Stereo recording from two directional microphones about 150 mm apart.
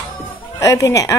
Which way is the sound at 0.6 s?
20° left (ahead or behind).